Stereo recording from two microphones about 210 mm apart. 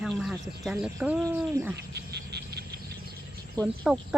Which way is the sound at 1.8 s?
50° right (ahead or behind).